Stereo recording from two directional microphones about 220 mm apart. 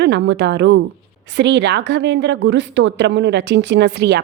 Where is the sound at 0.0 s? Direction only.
50° right (ahead or behind).